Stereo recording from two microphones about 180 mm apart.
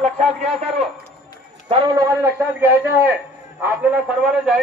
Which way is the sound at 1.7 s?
25° right (ahead or behind).